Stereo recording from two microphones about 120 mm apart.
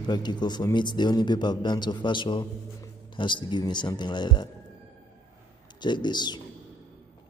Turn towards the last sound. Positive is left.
turn(degrees=40)  # may be behind; listen again after turning